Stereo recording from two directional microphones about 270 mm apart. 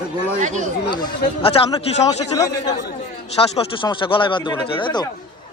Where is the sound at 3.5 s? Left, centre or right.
Centre.